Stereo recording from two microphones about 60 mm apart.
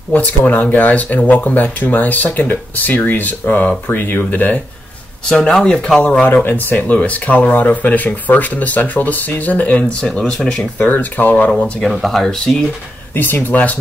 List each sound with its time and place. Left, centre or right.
0.1 s speech: left
5.3 s speech: centre
6.2 s speech: left; by 10.7 s centre
10.8 s speech: left
11.8 s speech: centre
13.1 s speech: left